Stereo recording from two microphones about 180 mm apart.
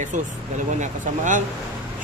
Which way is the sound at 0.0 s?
45° right (ahead or behind).